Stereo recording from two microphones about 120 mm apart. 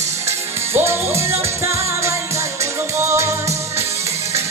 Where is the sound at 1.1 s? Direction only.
20° right (ahead or behind).